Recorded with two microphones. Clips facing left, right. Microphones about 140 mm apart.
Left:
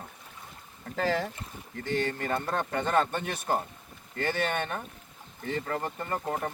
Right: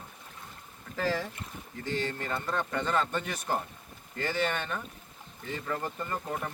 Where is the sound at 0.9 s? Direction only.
60° left (ahead or behind).